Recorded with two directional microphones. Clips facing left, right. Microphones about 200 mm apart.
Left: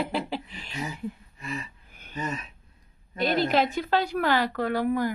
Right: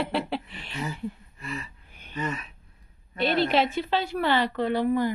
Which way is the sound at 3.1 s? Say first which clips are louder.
Even; 45° left (ahead or behind).